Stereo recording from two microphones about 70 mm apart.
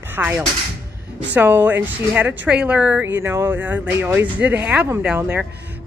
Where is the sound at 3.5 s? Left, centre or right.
Right.